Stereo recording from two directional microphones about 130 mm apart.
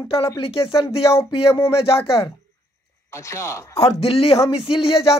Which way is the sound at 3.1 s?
20° left (ahead or behind).